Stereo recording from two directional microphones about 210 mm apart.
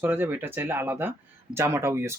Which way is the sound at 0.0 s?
10° right (ahead or behind).